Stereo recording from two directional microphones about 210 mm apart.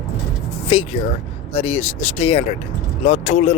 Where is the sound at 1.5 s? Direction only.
30° left (ahead or behind).